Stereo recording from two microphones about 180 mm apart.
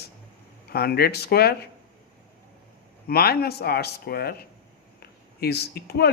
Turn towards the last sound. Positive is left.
turn(degrees=65)  # may be behind; listen again after turning